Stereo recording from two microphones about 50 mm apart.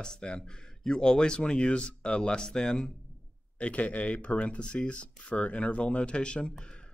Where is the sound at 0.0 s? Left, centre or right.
Centre.